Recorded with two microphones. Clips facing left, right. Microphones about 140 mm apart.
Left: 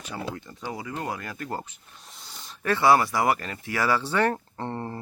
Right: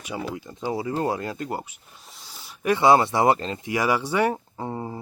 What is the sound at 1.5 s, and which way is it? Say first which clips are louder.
Speech: right 2 dB; 10° right (ahead or behind).